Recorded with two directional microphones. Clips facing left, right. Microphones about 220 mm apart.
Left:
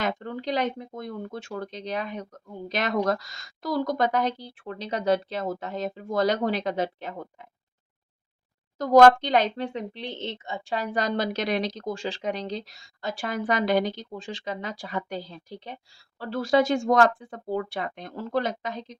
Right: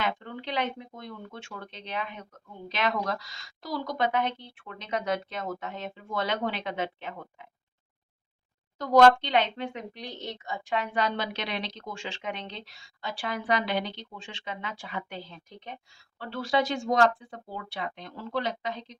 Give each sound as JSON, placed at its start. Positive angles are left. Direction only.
{"t": 0.0, "sound": "a woman's voice", "side_deg": 40}
{"t": 8.8, "sound": "a woman's voice", "side_deg": 45}